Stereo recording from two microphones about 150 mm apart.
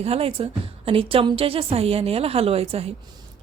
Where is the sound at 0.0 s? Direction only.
40° right (ahead or behind).